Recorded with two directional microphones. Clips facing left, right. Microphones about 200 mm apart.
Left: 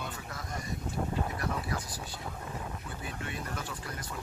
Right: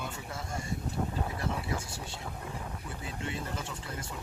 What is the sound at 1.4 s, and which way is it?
Speech, 25° right (ahead or behind).